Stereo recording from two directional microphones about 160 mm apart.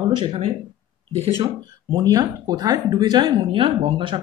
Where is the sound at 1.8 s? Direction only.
25° right (ahead or behind).